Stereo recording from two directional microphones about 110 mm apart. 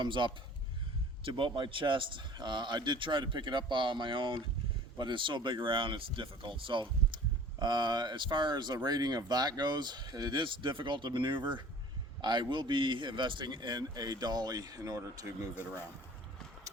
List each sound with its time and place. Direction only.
0.0 s speech: 45° right (ahead or behind)